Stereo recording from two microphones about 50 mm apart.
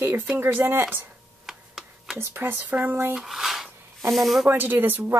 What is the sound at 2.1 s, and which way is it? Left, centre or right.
Speech, right.